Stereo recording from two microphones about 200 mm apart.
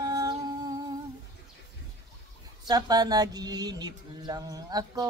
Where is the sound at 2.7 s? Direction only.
20° right (ahead or behind).